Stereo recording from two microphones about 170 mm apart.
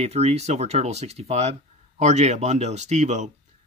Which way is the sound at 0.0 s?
40° right (ahead or behind).